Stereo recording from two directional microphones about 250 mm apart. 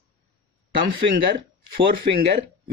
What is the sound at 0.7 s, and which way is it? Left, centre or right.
Speech, right.